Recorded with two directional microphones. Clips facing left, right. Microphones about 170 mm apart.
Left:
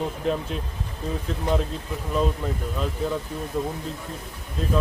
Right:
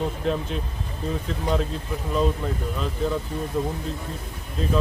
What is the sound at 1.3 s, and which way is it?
Speech, centre (ahead or behind).